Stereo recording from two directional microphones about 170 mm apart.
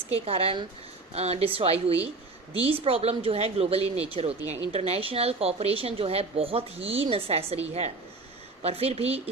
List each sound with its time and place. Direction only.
0.3 s a woman's voice: 35° right (ahead or behind)